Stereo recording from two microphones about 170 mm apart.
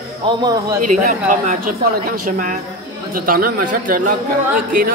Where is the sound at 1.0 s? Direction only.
50° right (ahead or behind).